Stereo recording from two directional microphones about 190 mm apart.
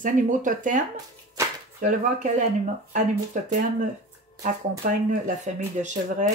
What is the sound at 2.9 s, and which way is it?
Speech, 40° right (ahead or behind).